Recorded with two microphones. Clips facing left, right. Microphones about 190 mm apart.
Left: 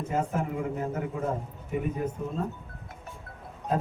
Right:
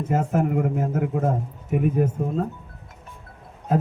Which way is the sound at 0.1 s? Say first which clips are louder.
Right 7 dB; 55° right (ahead or behind).